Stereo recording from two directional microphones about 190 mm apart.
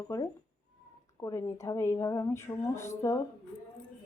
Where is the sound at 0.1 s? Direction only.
20° left (ahead or behind).